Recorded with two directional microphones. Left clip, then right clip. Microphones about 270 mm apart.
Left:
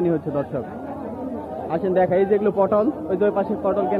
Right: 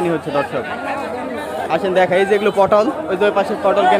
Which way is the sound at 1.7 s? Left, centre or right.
Centre.